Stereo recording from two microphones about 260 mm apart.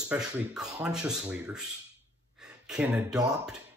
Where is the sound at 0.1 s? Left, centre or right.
Centre.